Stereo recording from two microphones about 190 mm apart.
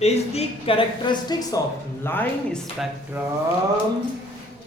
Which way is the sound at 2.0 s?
10° left (ahead or behind).